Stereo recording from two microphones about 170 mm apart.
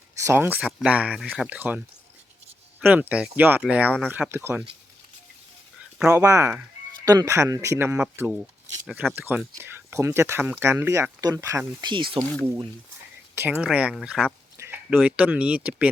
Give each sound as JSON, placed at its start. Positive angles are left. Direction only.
{"t": 0.3, "sound": "speech", "side_deg": -10}
{"t": 2.8, "sound": "speech", "side_deg": -10}
{"t": 6.1, "sound": "speech", "side_deg": -15}
{"t": 13.3, "sound": "speech", "side_deg": -10}